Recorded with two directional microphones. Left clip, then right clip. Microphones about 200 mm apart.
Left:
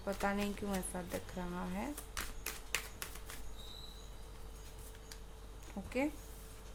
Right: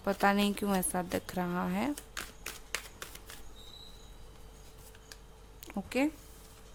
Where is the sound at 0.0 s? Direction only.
50° right (ahead or behind).